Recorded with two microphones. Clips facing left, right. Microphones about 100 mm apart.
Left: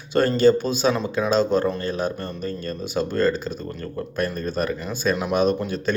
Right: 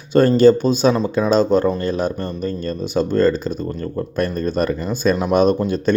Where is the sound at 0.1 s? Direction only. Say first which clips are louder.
Right 5 dB; 40° right (ahead or behind).